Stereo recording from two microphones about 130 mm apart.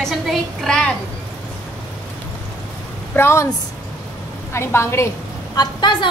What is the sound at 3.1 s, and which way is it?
Speech, 20° left (ahead or behind).